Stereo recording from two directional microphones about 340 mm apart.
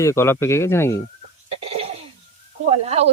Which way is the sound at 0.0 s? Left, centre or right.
Centre.